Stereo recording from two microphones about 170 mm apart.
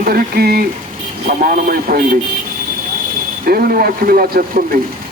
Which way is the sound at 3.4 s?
60° right (ahead or behind).